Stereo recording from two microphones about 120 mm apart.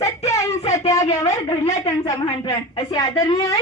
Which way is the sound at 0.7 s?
25° left (ahead or behind).